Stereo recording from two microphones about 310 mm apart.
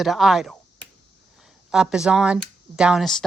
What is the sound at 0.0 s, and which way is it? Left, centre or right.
Speech, centre.